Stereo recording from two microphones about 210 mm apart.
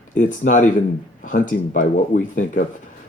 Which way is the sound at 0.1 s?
40° left (ahead or behind).